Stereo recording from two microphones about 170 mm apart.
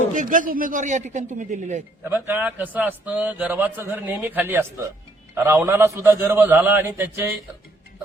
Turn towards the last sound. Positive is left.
turn(degrees=-10)  # may be behind; listen again after turning